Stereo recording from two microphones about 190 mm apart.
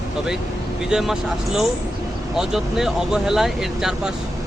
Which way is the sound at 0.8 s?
5° right (ahead or behind).